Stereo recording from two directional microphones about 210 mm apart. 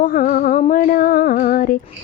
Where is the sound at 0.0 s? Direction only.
40° left (ahead or behind).